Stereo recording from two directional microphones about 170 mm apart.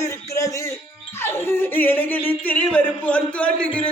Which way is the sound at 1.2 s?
15° left (ahead or behind).